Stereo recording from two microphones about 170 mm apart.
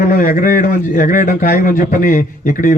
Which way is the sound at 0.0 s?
55° left (ahead or behind).